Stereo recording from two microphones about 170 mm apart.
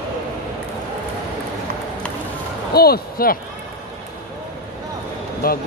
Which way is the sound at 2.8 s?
65° left (ahead or behind).